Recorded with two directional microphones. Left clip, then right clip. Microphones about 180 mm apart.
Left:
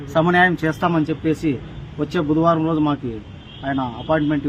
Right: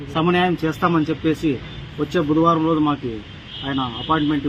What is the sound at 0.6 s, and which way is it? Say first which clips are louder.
A man's voice: even; 30° left (ahead or behind).